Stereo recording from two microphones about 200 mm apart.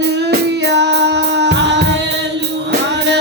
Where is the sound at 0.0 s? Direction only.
60° right (ahead or behind).